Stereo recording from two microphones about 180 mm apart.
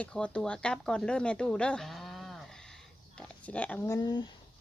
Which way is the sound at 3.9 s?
25° left (ahead or behind).